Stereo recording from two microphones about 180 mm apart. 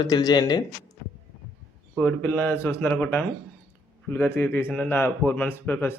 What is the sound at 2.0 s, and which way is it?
A man's voice, 10° left (ahead or behind).